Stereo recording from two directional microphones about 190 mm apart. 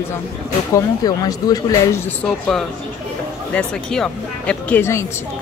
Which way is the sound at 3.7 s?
5° left (ahead or behind).